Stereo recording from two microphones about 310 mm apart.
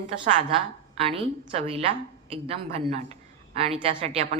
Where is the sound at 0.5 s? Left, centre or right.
Centre.